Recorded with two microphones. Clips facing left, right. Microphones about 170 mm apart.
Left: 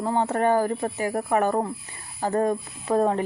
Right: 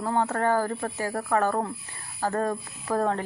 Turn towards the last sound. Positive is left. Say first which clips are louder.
# left 4 dB
turn(degrees=20)  # may be behind; listen again after turning